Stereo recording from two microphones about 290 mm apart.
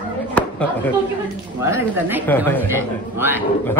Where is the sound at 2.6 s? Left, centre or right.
Centre.